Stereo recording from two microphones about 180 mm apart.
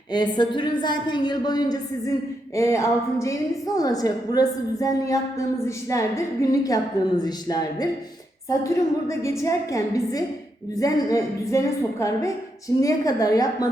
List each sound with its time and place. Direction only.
0.1 s a woman's voice: 25° left (ahead or behind)